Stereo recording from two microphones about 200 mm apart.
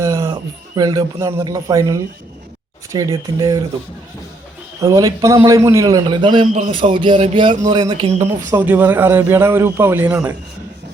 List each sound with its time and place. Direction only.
0.0 s a sound: 15° right (ahead or behind)
0.8 s a man's voice: 20° right (ahead or behind)
4.8 s a man's voice: 20° right (ahead or behind)
8.1 s speech: 35° right (ahead or behind)
8.4 s a man's voice: 10° right (ahead or behind)